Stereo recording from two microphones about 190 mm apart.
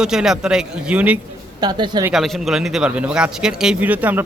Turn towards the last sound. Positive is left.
turn(degrees=-10)  # may be behind; listen again after turning